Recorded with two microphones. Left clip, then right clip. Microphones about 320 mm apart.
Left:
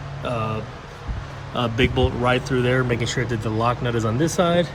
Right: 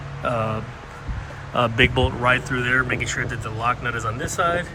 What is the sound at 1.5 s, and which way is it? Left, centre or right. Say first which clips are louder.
Speech: right 3 dB; centre.